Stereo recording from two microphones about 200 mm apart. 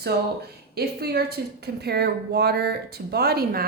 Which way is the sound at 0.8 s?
55° right (ahead or behind).